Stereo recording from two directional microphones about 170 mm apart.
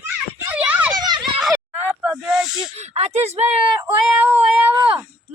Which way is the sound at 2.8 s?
40° right (ahead or behind).